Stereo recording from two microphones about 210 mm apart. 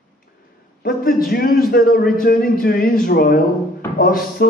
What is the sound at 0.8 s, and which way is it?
A man's voice, 45° left (ahead or behind).